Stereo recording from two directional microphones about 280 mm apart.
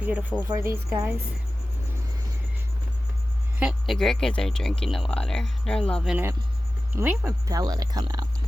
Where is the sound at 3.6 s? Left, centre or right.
Centre.